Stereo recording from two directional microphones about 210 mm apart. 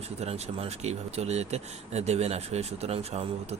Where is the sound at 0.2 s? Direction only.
30° right (ahead or behind).